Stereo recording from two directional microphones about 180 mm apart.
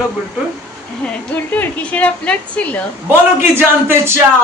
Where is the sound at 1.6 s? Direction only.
10° left (ahead or behind).